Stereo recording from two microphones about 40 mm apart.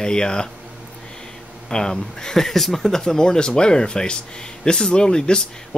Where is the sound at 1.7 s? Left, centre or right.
Centre.